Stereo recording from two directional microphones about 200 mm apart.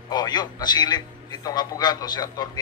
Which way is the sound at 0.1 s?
20° left (ahead or behind).